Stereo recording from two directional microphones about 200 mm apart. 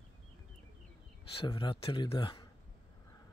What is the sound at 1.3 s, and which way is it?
Speech, 25° left (ahead or behind).